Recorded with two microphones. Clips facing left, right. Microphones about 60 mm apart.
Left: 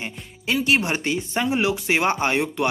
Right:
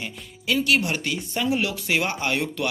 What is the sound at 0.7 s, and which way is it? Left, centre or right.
Speech, left.